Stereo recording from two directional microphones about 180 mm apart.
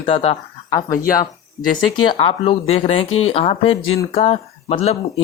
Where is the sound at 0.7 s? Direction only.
20° left (ahead or behind).